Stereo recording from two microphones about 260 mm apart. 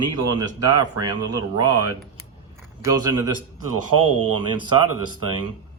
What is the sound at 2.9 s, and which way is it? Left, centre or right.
Speech, centre.